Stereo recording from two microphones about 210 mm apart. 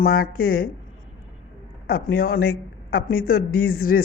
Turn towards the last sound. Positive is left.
turn(degrees=45)  # may be behind; listen again after turning